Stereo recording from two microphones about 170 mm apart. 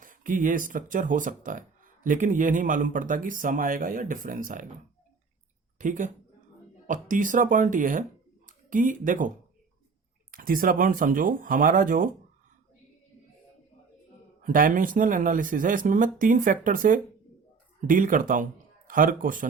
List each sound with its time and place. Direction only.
0.0 s speech: 50° right (ahead or behind)
5.8 s speech: 50° right (ahead or behind)
10.3 s speech: 55° right (ahead or behind)
14.4 s speech: 55° right (ahead or behind)